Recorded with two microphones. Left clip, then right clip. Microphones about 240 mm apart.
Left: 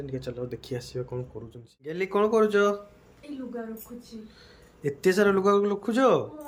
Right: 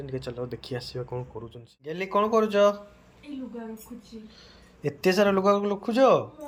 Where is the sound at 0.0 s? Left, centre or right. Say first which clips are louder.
Even; centre.